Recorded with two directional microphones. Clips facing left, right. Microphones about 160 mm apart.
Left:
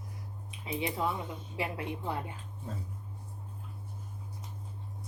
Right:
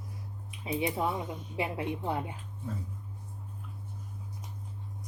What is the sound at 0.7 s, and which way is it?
Speech, 20° right (ahead or behind).